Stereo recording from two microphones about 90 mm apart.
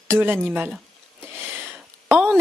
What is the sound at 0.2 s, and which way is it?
Speech, 25° right (ahead or behind).